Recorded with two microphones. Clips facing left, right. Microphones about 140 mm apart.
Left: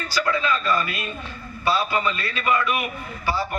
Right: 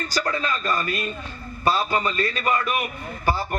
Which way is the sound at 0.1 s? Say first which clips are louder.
Left 4 dB; 45° right (ahead or behind).